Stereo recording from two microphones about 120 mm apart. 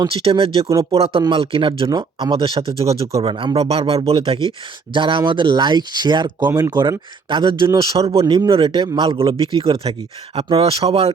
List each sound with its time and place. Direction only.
0.1 s a man's voice: 50° right (ahead or behind)
0.7 s speech: 25° right (ahead or behind)
0.9 s a man's voice: 50° right (ahead or behind)
7.9 s a man's voice: 55° right (ahead or behind)
8.2 s speech: 30° right (ahead or behind)
8.4 s a man's voice: 45° right (ahead or behind)